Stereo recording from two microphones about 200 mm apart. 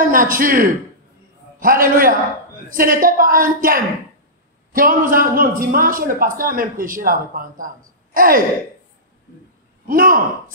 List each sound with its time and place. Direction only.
0.0 s a man's voice: 45° right (ahead or behind)
9.8 s a man's voice: 45° right (ahead or behind)